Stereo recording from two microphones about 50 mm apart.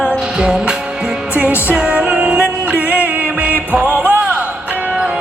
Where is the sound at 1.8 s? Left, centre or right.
Right.